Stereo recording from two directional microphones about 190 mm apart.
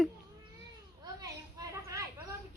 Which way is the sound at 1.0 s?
20° right (ahead or behind).